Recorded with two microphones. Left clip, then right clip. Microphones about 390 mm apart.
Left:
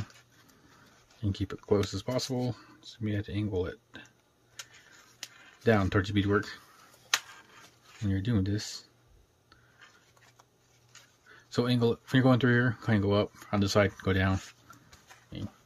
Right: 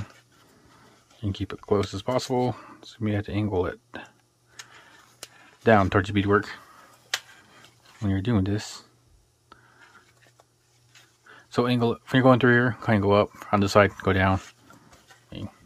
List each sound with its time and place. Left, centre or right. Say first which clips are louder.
1.2 s speech: right 3 dB; centre
5.6 s speech: right 7 dB; centre
8.0 s speech: right 6 dB; centre
11.2 s speech: right 6 dB; centre
15.2 s pig: right 4 dB; centre